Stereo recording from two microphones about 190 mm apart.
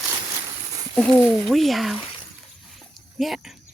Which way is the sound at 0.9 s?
5° left (ahead or behind).